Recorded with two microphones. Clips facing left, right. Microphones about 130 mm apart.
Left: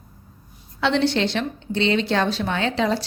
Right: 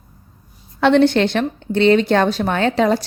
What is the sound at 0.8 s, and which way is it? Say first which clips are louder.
Speech: right 7 dB; 50° right (ahead or behind).